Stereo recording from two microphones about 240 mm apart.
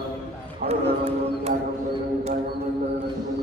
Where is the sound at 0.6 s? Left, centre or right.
Right.